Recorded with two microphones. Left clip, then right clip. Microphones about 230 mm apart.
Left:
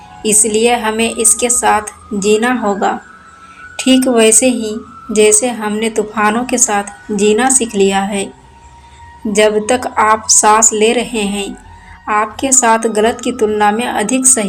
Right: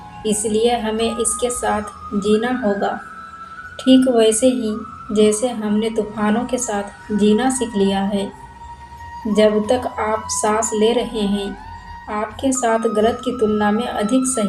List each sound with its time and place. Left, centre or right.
0.4 s a woman's voice: left
9.3 s a woman's voice: left